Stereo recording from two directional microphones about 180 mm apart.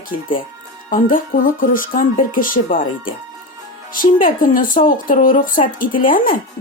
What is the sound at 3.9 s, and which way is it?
Speech, 50° left (ahead or behind).